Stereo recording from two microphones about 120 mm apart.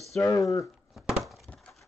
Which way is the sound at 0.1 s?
25° left (ahead or behind).